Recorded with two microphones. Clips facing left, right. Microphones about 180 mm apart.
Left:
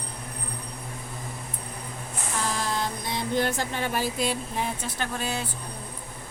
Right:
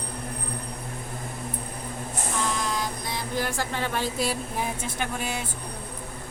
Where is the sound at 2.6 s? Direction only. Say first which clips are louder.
Even; 30° left (ahead or behind); by 4.1 s 10° left (ahead or behind).